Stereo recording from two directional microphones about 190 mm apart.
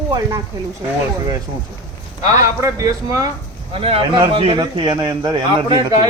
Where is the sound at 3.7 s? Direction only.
30° right (ahead or behind).